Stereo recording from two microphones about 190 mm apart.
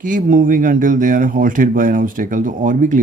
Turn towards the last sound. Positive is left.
turn(degrees=-45)  # may be behind; listen again after turning